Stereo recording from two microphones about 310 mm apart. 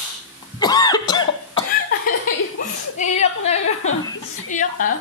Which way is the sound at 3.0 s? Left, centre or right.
Left.